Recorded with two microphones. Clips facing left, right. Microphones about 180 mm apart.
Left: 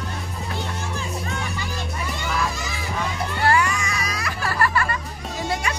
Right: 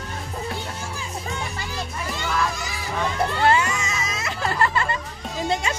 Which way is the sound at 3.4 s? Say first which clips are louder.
Left 2 dB; 20° right (ahead or behind).